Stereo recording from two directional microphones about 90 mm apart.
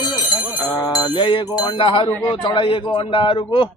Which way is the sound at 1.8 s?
70° left (ahead or behind).